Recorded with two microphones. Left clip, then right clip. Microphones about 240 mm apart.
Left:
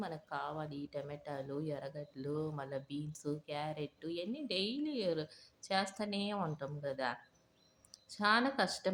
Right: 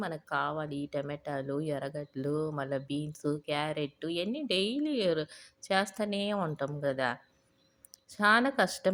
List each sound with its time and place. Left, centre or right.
0.0 s speech: right